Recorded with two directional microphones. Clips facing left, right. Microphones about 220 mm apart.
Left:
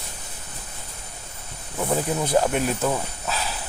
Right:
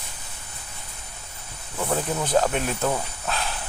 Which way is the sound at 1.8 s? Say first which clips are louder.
Left 2 dB; 10° left (ahead or behind).